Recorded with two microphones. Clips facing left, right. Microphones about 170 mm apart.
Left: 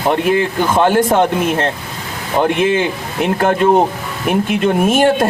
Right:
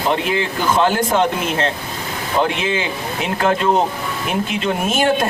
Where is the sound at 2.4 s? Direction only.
50° left (ahead or behind).